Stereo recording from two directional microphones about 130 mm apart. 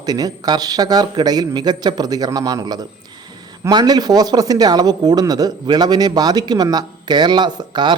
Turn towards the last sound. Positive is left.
turn(degrees=-35)  # may be behind; listen again after turning